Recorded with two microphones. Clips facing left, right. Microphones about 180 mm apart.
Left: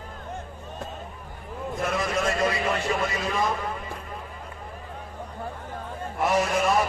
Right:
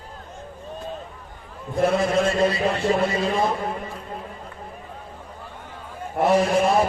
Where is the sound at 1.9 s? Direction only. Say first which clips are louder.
Right 4 dB; 30° right (ahead or behind).